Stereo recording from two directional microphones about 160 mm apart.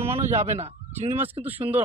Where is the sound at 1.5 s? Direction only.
10° right (ahead or behind).